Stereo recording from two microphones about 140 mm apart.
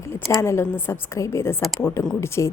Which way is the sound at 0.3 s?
20° left (ahead or behind).